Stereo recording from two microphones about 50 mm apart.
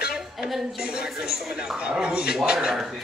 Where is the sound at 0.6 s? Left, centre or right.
Centre.